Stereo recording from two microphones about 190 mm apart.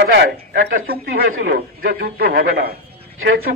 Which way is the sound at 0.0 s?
65° right (ahead or behind).